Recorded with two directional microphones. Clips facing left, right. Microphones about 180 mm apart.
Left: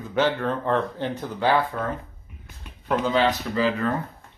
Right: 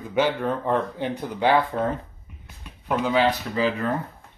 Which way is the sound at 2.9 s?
10° right (ahead or behind).